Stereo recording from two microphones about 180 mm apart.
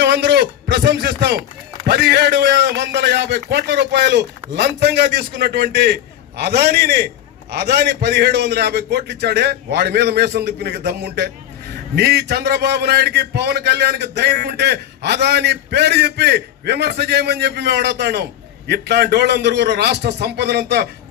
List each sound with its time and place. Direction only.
0.0 s a man's voice: 65° right (ahead or behind)